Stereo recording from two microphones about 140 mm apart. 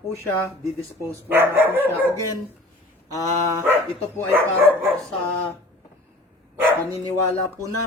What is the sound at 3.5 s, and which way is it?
Speech, 25° right (ahead or behind).